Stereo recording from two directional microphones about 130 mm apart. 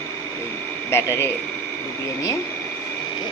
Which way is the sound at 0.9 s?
20° left (ahead or behind).